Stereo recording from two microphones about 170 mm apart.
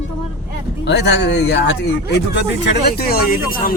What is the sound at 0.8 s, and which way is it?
Speech, 85° left.